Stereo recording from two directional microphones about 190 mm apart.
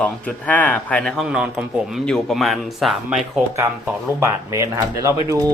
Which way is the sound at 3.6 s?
15° right (ahead or behind).